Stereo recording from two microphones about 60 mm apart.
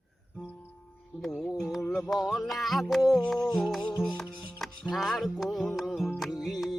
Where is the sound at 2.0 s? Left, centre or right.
Centre.